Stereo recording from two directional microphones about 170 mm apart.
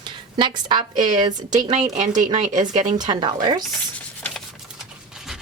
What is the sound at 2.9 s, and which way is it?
Speech, 25° right (ahead or behind).